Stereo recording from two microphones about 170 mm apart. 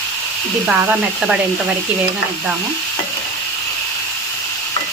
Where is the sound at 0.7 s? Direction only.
5° right (ahead or behind).